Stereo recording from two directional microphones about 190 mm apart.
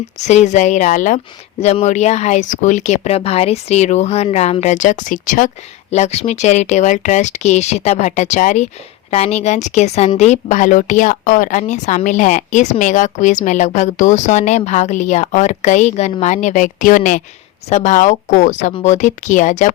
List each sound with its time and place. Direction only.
0.2 s speech: 35° left (ahead or behind)